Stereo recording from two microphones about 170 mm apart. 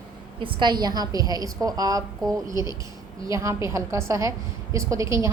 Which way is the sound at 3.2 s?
20° right (ahead or behind).